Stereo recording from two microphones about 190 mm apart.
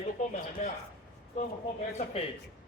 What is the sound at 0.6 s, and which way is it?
Speech, 40° left (ahead or behind).